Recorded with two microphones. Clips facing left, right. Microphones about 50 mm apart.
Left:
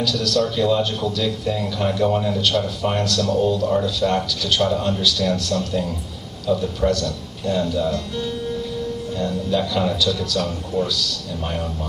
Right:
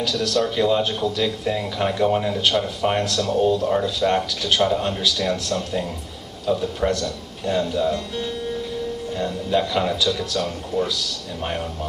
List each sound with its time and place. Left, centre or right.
0.0 s speech: right